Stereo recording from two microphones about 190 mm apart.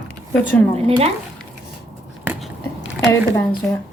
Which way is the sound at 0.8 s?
30° right (ahead or behind).